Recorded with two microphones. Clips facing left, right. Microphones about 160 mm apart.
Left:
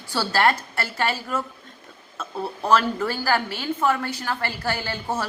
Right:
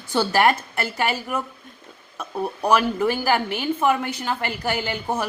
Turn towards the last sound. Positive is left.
turn(degrees=-15)  # may be behind; listen again after turning